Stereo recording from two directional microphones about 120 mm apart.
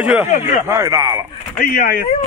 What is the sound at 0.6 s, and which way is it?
Speech, 25° right (ahead or behind).